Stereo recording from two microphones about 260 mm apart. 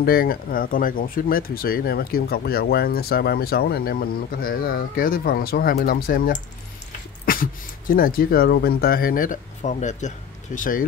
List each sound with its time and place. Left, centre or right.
0.0 s speech: left